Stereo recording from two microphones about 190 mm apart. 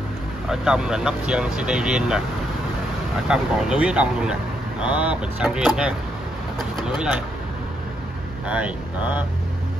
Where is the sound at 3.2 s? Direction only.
5° right (ahead or behind).